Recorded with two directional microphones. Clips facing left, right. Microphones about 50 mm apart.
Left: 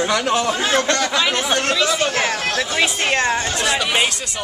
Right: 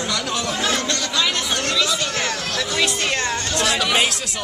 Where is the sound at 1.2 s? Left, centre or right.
Left.